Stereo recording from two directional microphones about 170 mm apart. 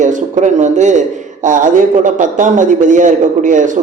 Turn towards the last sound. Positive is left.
turn(degrees=-50)  # may be behind; listen again after turning